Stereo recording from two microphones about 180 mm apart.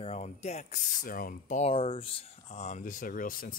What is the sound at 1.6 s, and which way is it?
Speech, 30° left (ahead or behind).